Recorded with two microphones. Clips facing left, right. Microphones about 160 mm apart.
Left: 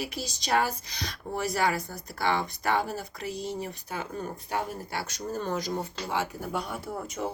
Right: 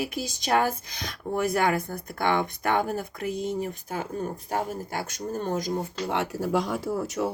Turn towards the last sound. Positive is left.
turn(degrees=-80)